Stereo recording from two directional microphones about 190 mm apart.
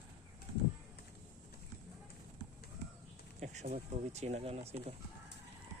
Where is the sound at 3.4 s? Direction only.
35° right (ahead or behind).